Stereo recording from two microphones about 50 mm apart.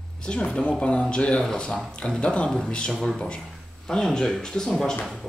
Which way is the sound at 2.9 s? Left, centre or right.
Centre.